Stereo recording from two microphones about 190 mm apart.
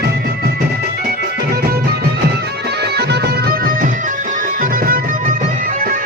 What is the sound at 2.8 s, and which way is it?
Music, 60° right (ahead or behind).